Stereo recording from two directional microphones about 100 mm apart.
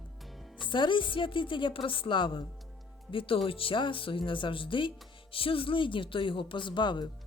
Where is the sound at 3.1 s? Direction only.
65° left (ahead or behind).